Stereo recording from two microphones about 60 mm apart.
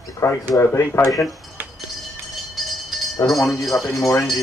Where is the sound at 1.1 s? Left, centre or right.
Centre.